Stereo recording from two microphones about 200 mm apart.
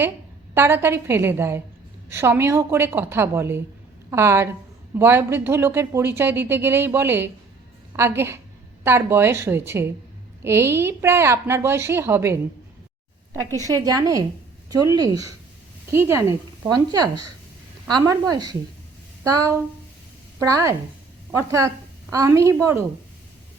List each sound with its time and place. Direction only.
0.5 s speech: 10° right (ahead or behind)
13.8 s a woman's voice: 20° right (ahead or behind)